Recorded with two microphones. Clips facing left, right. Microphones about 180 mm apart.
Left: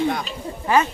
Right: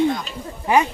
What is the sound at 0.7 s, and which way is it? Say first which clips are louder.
Speech: right 1 dB; 15° right (ahead or behind).